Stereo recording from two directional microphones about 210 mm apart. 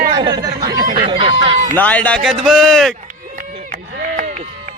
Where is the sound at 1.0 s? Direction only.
25° right (ahead or behind).